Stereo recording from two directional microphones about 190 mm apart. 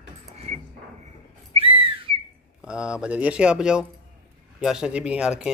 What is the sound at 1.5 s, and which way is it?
Whistle, 30° right (ahead or behind).